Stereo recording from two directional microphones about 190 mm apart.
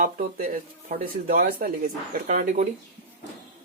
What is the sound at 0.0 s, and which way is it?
Speech, 45° right (ahead or behind).